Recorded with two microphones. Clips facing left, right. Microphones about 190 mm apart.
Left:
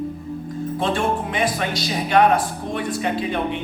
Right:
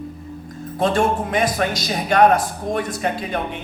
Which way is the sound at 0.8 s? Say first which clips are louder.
Right 4 dB; 45° right (ahead or behind).